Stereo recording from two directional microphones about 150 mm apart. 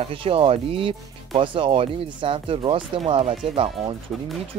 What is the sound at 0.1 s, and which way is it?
Speech, 35° right (ahead or behind).